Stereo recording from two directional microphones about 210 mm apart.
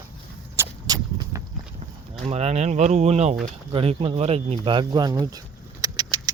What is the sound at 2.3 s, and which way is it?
Speech, 30° right (ahead or behind).